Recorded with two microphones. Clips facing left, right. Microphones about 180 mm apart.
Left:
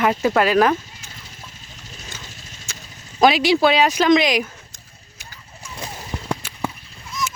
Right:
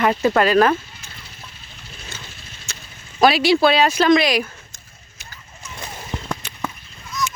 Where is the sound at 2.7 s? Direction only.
15° left (ahead or behind).